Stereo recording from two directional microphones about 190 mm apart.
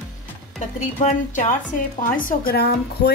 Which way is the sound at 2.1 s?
50° left (ahead or behind).